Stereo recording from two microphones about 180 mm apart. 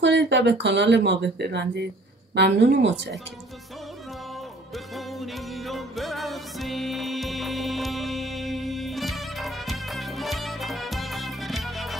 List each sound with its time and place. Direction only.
0.0 s speech: 75° right (ahead or behind)
4.7 s music: centre (ahead or behind)